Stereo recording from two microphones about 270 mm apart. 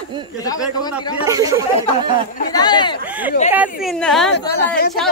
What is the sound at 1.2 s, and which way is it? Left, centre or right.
Speech, centre.